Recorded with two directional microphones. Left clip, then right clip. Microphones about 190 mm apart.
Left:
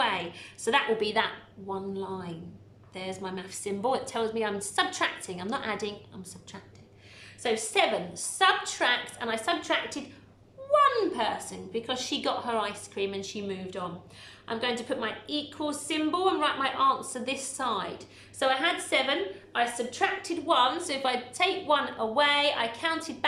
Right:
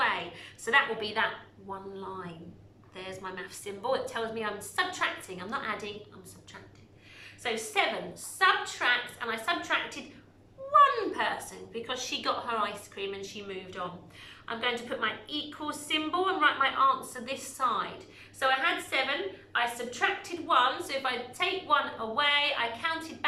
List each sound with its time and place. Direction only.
0.0 s a woman's voice: 30° left (ahead or behind)
3.2 s a woman's voice: 25° left (ahead or behind)
7.4 s a woman's voice: 30° left (ahead or behind)